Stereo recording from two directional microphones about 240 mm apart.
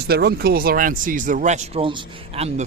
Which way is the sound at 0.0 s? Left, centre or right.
Right.